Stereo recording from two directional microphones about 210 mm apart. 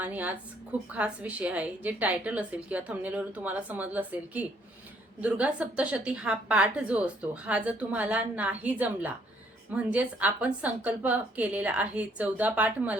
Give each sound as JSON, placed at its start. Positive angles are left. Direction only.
{"t": 0.0, "sound": "a woman's voice", "side_deg": -10}